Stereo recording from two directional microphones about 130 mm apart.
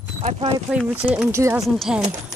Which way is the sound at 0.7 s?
10° right (ahead or behind).